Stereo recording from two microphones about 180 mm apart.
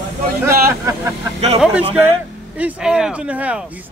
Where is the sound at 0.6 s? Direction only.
15° right (ahead or behind).